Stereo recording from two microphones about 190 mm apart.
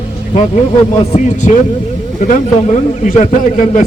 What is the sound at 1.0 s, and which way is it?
Speech, 35° left (ahead or behind).